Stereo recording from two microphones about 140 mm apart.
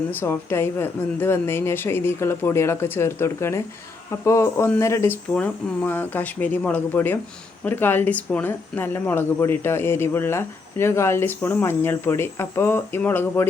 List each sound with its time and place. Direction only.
0.1 s speech: 15° left (ahead or behind)